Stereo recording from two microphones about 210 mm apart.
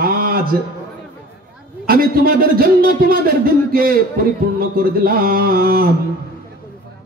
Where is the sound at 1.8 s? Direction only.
45° right (ahead or behind).